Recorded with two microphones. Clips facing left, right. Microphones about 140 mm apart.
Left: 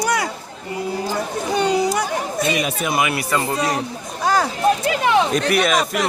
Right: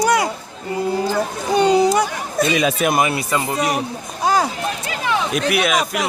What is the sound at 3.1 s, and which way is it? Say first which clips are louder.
Speech: even; 20° right (ahead or behind).